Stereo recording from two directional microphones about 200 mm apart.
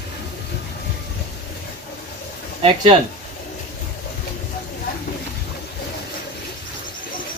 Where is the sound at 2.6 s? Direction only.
25° right (ahead or behind).